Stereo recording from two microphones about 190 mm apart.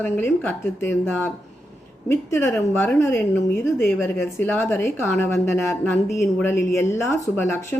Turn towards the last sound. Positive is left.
turn(degrees=10)  # may be behind; listen again after turning